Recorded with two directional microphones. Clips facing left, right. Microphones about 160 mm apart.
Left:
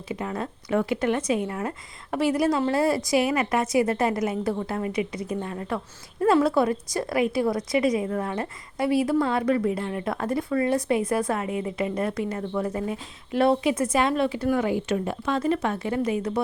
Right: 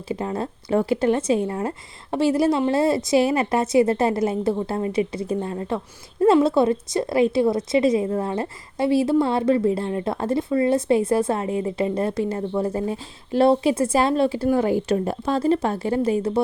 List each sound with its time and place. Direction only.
0.1 s a woman's voice: 30° right (ahead or behind)